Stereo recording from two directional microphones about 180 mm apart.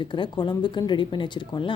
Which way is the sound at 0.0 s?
25° left (ahead or behind).